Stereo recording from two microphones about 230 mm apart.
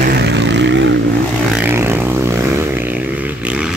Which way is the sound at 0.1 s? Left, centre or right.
Right.